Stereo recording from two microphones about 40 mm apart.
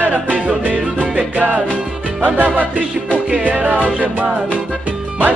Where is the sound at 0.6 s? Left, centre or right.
Right.